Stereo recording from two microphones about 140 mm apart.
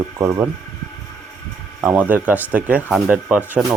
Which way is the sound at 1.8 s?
10° right (ahead or behind).